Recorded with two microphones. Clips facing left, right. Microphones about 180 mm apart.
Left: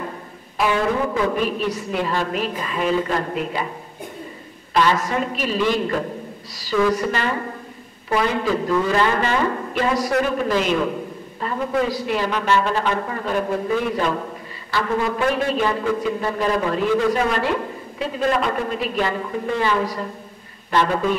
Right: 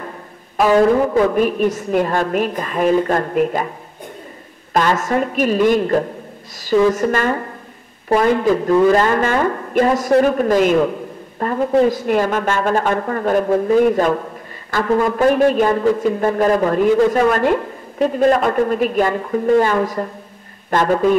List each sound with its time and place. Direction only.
0.6 s a man's voice: 45° right (ahead or behind)
4.7 s a man's voice: 45° right (ahead or behind)